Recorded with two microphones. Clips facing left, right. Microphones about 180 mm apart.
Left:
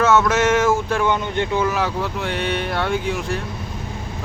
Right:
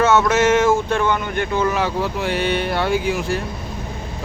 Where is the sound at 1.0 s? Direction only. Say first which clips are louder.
Even; 15° left (ahead or behind).